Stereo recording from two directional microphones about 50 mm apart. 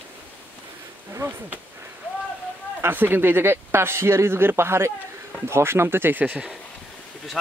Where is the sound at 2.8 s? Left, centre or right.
Right.